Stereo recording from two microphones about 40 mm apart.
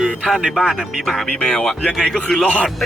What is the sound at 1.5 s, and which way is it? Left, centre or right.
Speech, centre.